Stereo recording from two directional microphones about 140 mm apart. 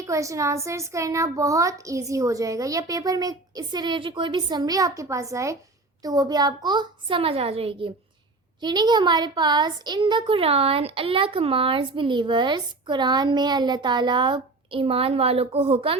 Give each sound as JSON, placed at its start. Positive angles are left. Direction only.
{"t": 0.0, "sound": "a woman's voice", "side_deg": -25}